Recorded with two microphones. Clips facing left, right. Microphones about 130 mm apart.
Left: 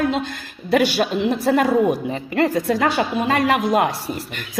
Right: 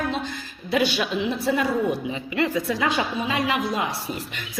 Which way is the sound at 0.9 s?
40° left (ahead or behind).